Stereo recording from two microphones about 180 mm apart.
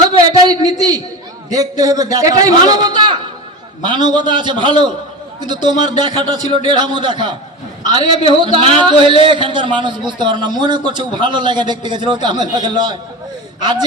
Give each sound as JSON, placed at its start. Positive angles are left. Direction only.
{"t": 0.1, "sound": "a sound", "side_deg": -20}
{"t": 1.5, "sound": "a man's voice", "side_deg": -20}
{"t": 8.4, "sound": "speech", "side_deg": 40}
{"t": 9.2, "sound": "a man's voice", "side_deg": -25}